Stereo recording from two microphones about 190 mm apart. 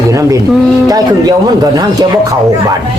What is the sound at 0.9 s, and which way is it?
Speech, 20° right (ahead or behind).